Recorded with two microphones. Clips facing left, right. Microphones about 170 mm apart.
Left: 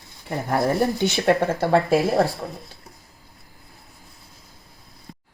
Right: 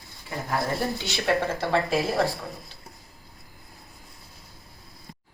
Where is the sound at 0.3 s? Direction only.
60° left (ahead or behind).